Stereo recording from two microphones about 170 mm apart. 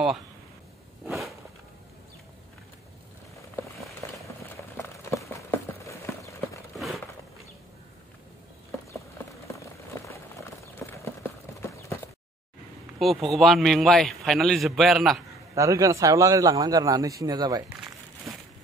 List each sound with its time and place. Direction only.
4.7 s clip-clop: 15° left (ahead or behind)
10.6 s clip-clop: 15° left (ahead or behind)
13.0 s a man's voice: centre (ahead or behind)
15.5 s a man's voice: 20° right (ahead or behind)